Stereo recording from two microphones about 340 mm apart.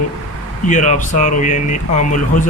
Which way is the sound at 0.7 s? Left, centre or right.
Left.